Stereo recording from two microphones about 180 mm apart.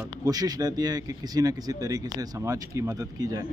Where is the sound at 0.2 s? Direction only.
20° right (ahead or behind).